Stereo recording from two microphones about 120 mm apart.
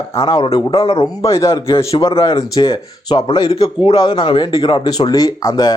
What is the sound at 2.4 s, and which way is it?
A man's voice, 35° left (ahead or behind).